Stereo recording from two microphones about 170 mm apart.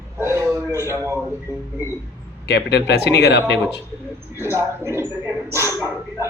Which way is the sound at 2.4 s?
80° left.